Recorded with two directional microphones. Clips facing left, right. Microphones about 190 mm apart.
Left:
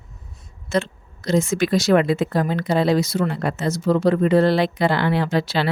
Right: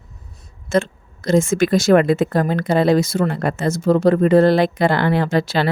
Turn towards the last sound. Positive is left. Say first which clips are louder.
# right 3 dB
turn(degrees=-50)  # may be behind; listen again after turning